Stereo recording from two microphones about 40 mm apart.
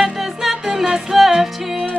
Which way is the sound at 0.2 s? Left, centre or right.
Centre.